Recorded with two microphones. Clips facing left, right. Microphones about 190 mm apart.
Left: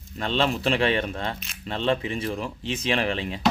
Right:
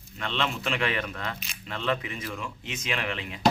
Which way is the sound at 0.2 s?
35° left (ahead or behind).